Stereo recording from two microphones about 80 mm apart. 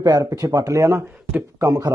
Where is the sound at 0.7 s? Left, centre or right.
Right.